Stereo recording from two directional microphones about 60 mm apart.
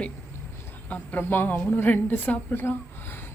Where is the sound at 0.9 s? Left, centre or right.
Left.